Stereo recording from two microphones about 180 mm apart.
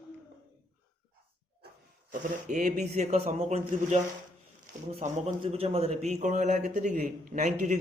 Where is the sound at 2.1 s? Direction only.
45° right (ahead or behind).